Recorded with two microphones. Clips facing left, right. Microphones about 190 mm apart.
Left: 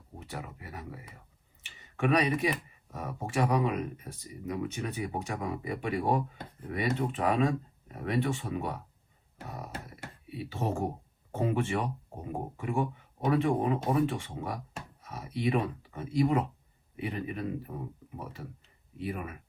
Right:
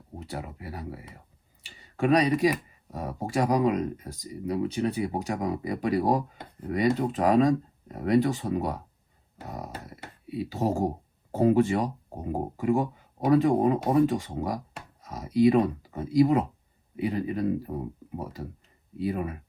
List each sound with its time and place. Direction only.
0.2 s speech: 35° right (ahead or behind)
18.9 s speech: 35° right (ahead or behind)